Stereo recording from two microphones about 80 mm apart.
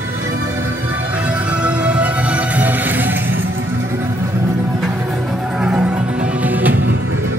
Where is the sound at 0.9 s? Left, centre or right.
Centre.